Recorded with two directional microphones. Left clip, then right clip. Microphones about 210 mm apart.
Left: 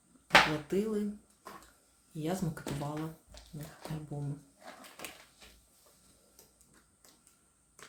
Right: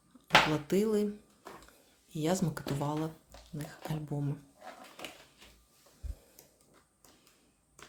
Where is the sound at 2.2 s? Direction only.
35° right (ahead or behind).